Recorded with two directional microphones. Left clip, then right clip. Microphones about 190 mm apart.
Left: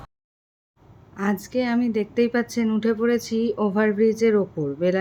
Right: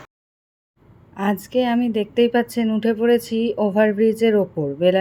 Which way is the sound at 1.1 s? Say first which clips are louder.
Right 4 dB; 5° right (ahead or behind).